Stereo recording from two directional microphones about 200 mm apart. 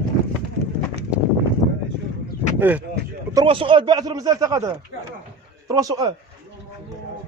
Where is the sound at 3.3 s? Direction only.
25° right (ahead or behind).